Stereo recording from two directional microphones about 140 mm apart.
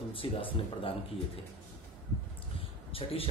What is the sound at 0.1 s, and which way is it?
Speech, 40° left (ahead or behind).